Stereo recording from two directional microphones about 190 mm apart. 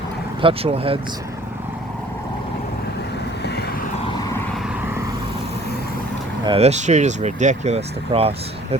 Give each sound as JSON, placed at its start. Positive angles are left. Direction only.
{"t": 0.4, "sound": "speech", "side_deg": -30}
{"t": 6.4, "sound": "speech", "side_deg": -30}